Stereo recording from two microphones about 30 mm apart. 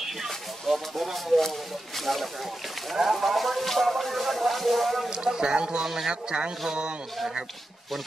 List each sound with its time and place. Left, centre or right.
0.7 s speech: centre
5.1 s speech: right
5.8 s a man's voice: centre
6.0 s speech: right